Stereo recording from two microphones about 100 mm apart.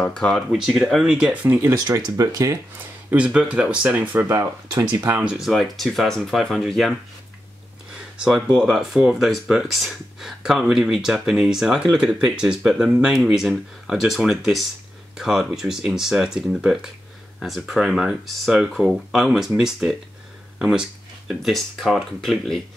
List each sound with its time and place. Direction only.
0.0 s speech: 5° left (ahead or behind)
0.5 s speech: 5° right (ahead or behind)
1.9 s speech: 40° right (ahead or behind)
3.1 s speech: 10° right (ahead or behind)
5.2 s speech: 5° right (ahead or behind)
8.2 s speech: 10° right (ahead or behind)